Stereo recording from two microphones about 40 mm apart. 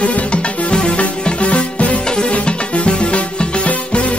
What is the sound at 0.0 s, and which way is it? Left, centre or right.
Music, left.